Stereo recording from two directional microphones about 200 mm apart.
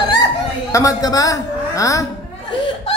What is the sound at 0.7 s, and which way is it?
A woman's voice, 15° left (ahead or behind).